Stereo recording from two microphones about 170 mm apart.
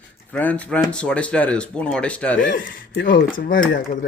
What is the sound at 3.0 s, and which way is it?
Speech, 55° left (ahead or behind).